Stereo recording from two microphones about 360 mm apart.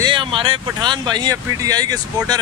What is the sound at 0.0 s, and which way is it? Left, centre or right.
Speech, centre.